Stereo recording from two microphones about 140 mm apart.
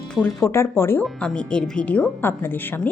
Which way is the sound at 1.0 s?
5° left (ahead or behind).